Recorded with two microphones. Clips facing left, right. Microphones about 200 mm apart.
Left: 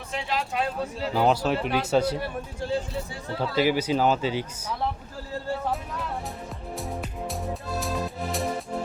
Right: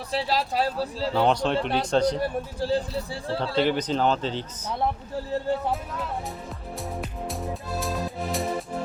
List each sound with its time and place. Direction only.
0.1 s speech: 35° right (ahead or behind)
1.1 s speech: 5° left (ahead or behind)
2.6 s speech: 35° right (ahead or behind)
3.6 s speech: 10° left (ahead or behind)
6.7 s music: centre (ahead or behind)